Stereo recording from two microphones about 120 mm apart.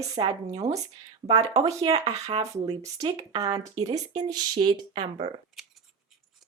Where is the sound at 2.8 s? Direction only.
30° right (ahead or behind); by 5.0 s 45° right (ahead or behind).